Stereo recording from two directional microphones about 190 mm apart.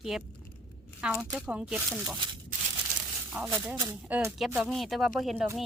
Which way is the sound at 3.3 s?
5° right (ahead or behind).